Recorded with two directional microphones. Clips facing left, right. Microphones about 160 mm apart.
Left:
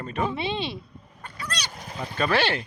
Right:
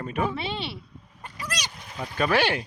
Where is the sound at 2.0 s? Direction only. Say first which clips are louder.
Right 1 dB; 10° right (ahead or behind).